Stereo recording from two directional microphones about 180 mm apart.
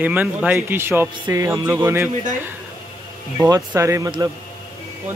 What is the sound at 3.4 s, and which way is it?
Speech, 20° right (ahead or behind).